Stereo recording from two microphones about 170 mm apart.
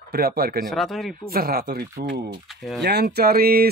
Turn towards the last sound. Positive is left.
turn(degrees=-65)  # may be behind; listen again after turning